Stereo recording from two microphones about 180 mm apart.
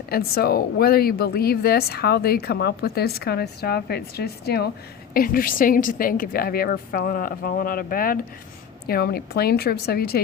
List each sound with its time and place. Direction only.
0.1 s a woman's voice: 60° left (ahead or behind)